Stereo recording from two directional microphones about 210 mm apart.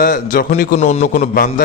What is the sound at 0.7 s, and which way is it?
Speech, 30° left (ahead or behind).